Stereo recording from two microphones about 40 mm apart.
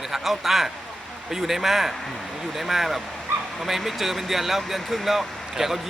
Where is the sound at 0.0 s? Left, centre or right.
Centre.